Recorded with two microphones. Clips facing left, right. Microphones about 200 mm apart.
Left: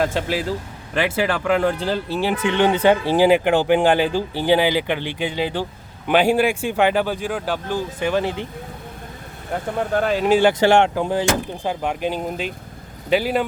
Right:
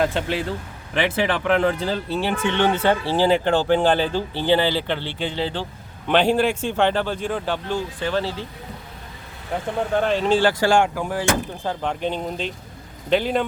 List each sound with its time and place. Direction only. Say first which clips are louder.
0.9 s speech: left 1 dB; centre (ahead or behind)
9.5 s speech: left 1 dB; 5° left (ahead or behind)